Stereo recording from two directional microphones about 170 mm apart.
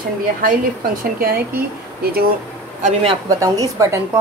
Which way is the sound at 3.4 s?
20° right (ahead or behind).